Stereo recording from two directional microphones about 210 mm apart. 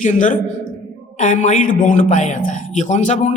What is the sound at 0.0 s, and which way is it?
A woman's voice, 35° left (ahead or behind).